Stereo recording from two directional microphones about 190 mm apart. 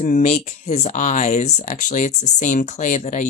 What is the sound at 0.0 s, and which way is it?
Speech, 35° left (ahead or behind).